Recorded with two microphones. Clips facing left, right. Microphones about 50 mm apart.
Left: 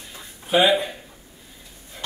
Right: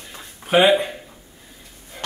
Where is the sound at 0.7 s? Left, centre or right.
Right.